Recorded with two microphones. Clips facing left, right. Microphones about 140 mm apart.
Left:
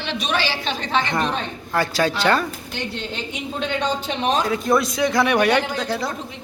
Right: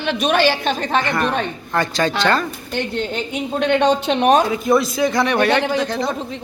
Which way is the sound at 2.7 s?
50° right (ahead or behind).